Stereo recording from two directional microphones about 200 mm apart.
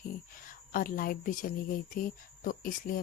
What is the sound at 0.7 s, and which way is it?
Speech, 45° left (ahead or behind).